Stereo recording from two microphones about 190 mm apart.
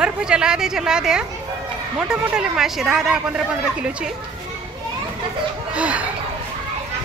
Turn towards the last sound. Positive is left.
turn(degrees=-5)  # may be behind; listen again after turning